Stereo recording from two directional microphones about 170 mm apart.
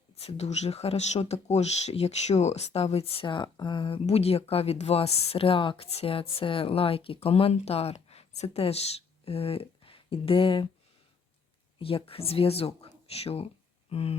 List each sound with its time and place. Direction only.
0.2 s speech: 40° left (ahead or behind)
11.8 s speech: 35° left (ahead or behind)